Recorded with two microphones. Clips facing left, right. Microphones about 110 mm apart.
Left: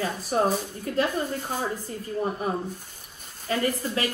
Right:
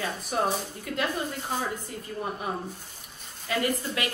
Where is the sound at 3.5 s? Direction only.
35° left (ahead or behind).